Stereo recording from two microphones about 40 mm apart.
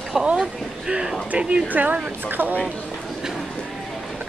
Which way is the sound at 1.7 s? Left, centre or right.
Right.